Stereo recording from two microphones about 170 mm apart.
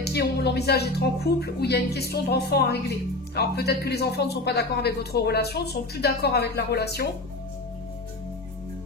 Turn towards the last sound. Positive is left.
turn(degrees=70)  # may be behind; listen again after turning